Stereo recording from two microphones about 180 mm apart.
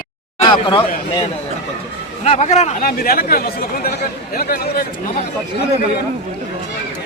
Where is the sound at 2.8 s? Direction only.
55° left (ahead or behind).